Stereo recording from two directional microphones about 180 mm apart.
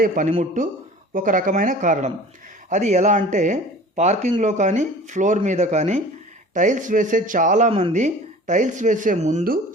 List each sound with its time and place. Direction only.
0.0 s speech: 45° right (ahead or behind)